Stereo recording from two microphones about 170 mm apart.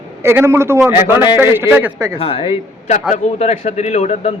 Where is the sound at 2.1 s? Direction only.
35° left (ahead or behind).